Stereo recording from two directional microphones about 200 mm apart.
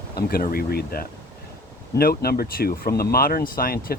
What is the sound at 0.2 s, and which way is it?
Speech, 50° left (ahead or behind).